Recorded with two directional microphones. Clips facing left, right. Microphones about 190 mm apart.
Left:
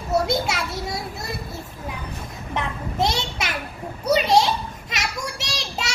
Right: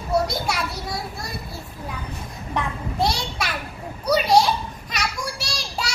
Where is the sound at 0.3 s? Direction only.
20° left (ahead or behind).